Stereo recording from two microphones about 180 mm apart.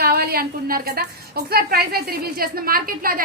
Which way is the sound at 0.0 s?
55° right (ahead or behind).